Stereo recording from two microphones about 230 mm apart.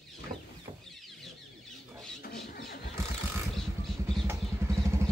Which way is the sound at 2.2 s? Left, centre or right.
Left.